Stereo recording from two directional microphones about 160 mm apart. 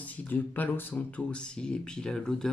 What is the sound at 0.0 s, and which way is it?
Speech, 10° left (ahead or behind).